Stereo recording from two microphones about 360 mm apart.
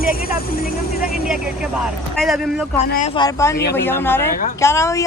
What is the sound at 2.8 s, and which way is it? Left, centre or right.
Speech, left.